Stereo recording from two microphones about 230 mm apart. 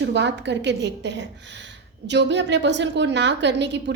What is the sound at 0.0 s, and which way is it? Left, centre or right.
A woman's voice, right.